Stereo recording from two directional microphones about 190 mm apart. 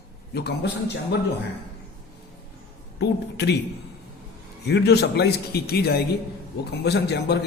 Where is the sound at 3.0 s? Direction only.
60° left (ahead or behind).